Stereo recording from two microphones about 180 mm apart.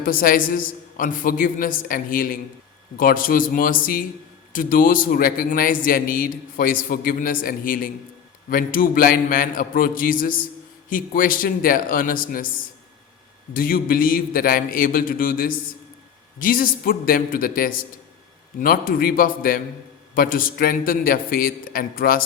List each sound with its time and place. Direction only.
0.0 s a man's voice: 55° left (ahead or behind)
13.5 s a man's voice: 55° left (ahead or behind)